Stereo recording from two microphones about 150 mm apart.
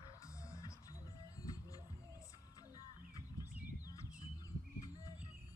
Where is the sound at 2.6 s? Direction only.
25° left (ahead or behind).